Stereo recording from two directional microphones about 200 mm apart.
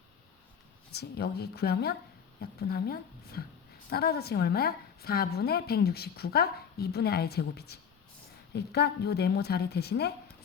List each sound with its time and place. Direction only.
0.9 s a woman's voice: 55° left (ahead or behind)